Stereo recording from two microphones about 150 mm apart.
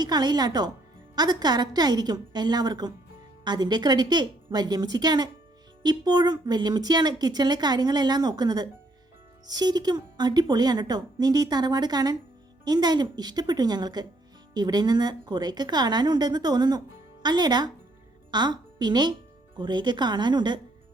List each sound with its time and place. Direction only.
0.0 s speech: 30° right (ahead or behind)